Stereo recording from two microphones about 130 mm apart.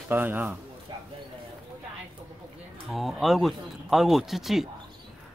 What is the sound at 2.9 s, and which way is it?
Speech, centre (ahead or behind).